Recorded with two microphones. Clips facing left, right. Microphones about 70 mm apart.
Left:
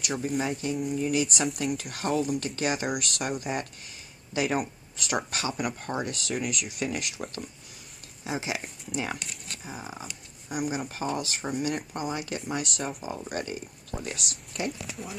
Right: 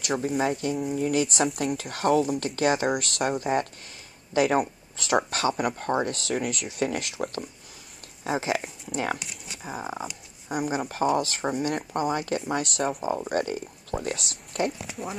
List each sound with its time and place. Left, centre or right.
0.0 s speech: right
9.2 s zipper: centre
9.6 s speech: right
13.0 s speech: right